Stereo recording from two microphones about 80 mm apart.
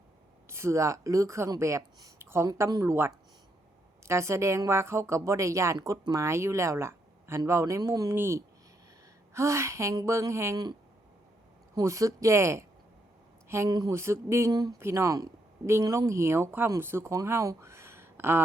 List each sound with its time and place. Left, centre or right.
0.4 s speech: right
2.1 s a sound: right
2.8 s speech: right
8.1 s speech: right
11.8 s speech: right
13.7 s speech: right
13.9 s speech: right
14.5 s speech: right
14.8 s speech: right